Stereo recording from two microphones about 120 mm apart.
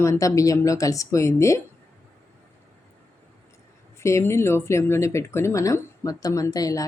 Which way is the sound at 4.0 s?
25° left (ahead or behind).